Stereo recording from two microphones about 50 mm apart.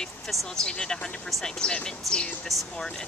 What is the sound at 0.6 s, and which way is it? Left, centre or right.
Speech, centre.